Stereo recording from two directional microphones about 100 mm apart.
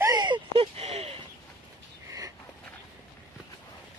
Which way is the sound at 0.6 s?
90° right.